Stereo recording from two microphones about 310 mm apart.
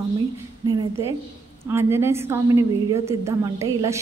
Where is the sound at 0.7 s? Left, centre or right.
Centre.